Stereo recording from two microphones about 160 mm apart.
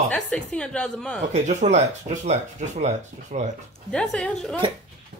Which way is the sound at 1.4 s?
45° right (ahead or behind).